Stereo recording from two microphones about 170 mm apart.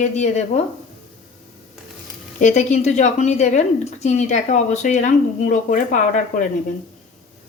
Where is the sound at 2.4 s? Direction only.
45° left (ahead or behind).